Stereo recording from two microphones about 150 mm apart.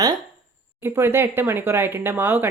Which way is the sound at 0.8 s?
15° right (ahead or behind).